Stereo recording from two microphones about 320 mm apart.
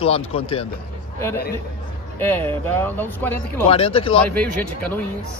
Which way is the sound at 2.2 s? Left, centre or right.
Centre.